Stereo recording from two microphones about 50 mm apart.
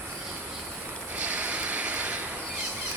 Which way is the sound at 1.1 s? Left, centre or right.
Right.